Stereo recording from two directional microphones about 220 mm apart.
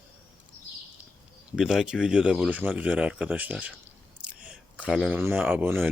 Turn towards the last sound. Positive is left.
turn(degrees=-10)  # may be behind; listen again after turning